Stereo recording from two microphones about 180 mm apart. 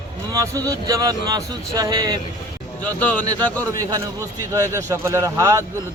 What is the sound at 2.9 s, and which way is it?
Speech, 10° left (ahead or behind).